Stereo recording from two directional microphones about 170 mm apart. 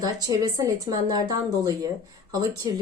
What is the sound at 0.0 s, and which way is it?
Speech, 20° right (ahead or behind).